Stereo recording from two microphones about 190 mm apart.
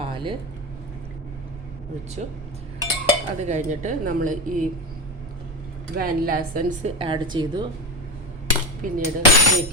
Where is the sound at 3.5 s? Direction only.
40° right (ahead or behind).